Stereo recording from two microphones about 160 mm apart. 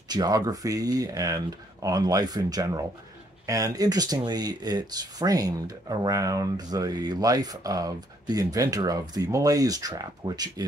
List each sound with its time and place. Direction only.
0.1 s speech: 25° right (ahead or behind)